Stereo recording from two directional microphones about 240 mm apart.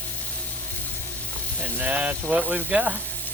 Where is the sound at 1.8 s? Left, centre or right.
Centre.